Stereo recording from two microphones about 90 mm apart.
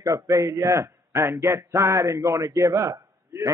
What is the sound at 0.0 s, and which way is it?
A man's voice, 40° right (ahead or behind).